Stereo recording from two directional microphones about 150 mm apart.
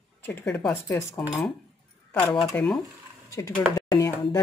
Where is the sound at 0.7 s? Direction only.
20° left (ahead or behind).